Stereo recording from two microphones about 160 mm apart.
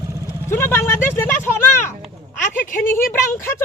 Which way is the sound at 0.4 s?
15° left (ahead or behind).